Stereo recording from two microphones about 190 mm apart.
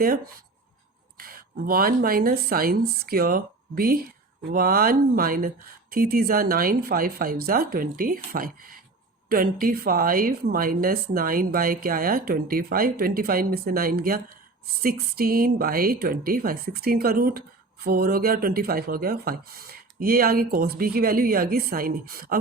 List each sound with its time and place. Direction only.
1.2 s a woman's voice: 50° right (ahead or behind)